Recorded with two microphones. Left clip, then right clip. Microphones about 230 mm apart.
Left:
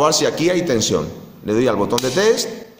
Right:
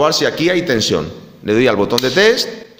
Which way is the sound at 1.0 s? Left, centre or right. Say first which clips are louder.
Right 2 dB; right.